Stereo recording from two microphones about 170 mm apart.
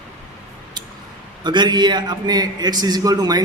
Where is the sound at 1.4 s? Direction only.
25° right (ahead or behind).